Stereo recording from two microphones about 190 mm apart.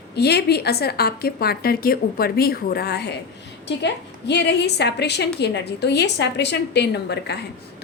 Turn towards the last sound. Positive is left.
turn(degrees=60)  # may be behind; listen again after turning